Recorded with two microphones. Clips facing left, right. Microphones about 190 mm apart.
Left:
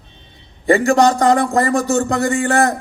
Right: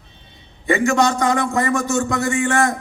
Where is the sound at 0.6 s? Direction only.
35° left (ahead or behind).